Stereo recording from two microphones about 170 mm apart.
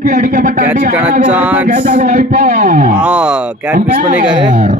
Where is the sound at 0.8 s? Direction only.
60° right (ahead or behind).